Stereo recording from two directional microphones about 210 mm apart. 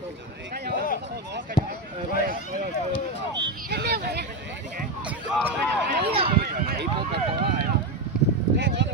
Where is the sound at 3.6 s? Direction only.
50° right (ahead or behind).